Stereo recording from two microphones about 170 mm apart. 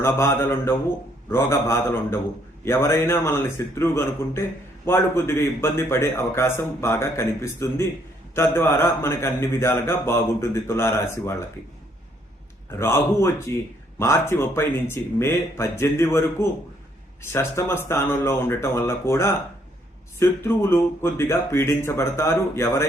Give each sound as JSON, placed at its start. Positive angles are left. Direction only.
{"t": 0.0, "sound": "speech", "side_deg": 15}
{"t": 12.8, "sound": "speech", "side_deg": 15}